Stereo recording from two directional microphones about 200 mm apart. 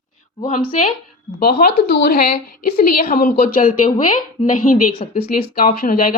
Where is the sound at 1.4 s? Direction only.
50° left (ahead or behind).